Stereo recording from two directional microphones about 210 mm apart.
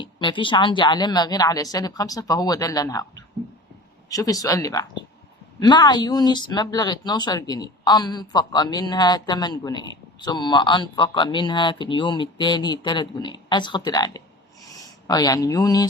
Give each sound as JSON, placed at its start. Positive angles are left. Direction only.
{"t": 0.0, "sound": "a woman's voice", "side_deg": 20}